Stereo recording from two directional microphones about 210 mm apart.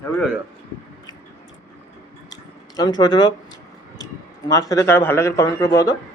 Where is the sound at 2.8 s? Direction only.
20° left (ahead or behind).